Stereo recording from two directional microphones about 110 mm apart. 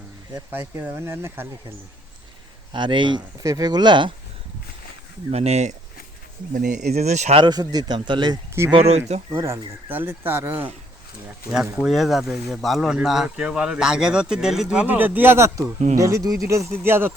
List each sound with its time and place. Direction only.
0.8 s speech: 20° right (ahead or behind)
2.7 s speech: 45° right (ahead or behind)
5.3 s speech: 80° right
6.9 s speech: 90° right
7.3 s a man's voice: 40° right (ahead or behind)
8.7 s speech: 70° right (ahead or behind)
9.9 s speech: 20° right (ahead or behind)
11.5 s speech: 5° right (ahead or behind); by 17.1 s 20° right (ahead or behind)